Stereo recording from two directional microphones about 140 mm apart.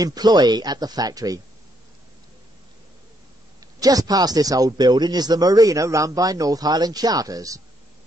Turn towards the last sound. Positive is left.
turn(degrees=-25)  # may be behind; listen again after turning